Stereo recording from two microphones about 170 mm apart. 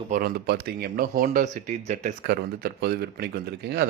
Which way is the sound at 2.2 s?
70° right (ahead or behind).